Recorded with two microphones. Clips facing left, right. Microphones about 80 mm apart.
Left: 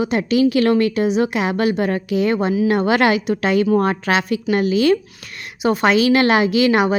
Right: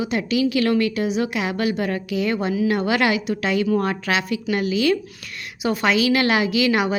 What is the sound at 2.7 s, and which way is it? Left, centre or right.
Speech, left.